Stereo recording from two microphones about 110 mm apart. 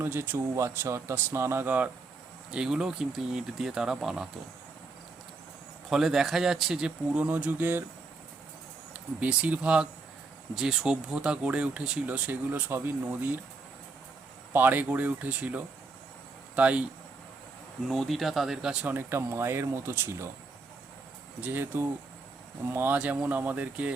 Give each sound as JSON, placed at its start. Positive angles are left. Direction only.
{"t": 0.0, "sound": "speech", "side_deg": -20}
{"t": 5.9, "sound": "speech", "side_deg": -5}
{"t": 8.9, "sound": "speech", "side_deg": -15}
{"t": 14.5, "sound": "speech", "side_deg": -15}
{"t": 17.8, "sound": "speech", "side_deg": 0}
{"t": 21.4, "sound": "speech", "side_deg": -20}